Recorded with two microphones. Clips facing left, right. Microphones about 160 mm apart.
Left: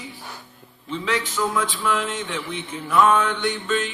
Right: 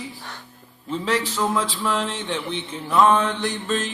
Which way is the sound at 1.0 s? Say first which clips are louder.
Right 1 dB; 35° right (ahead or behind).